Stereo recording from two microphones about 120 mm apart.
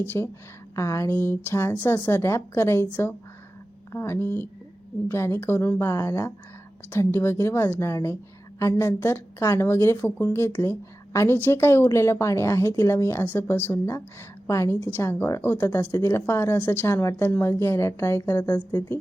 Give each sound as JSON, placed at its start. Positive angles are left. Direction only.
{"t": 0.0, "sound": "a woman's voice", "side_deg": 20}